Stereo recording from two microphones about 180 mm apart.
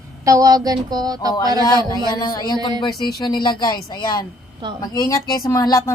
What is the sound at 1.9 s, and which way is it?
A woman's voice, 25° left (ahead or behind).